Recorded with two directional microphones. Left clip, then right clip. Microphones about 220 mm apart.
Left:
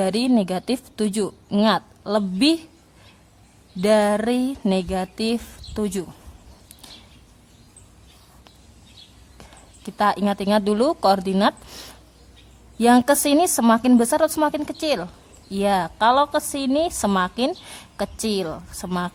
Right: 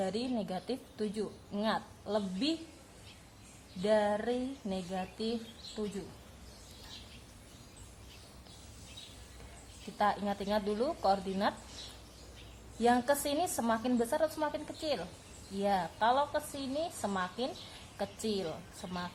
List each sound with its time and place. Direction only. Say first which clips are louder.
0.0 s a woman's voice: left 15 dB; 35° left (ahead or behind)
3.8 s a woman's voice: left 12 dB; 30° left (ahead or behind)
10.0 s a woman's voice: left 11 dB; 30° left (ahead or behind)
12.8 s a woman's voice: left 12 dB; 30° left (ahead or behind)